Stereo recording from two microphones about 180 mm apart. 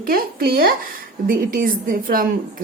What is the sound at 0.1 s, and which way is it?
A woman's voice, 55° right (ahead or behind).